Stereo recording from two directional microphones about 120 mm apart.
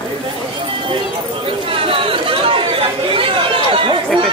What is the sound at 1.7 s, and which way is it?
Chatter, 50° right (ahead or behind).